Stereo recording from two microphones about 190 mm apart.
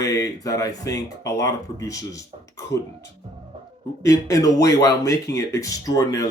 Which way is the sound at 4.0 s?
15° left (ahead or behind).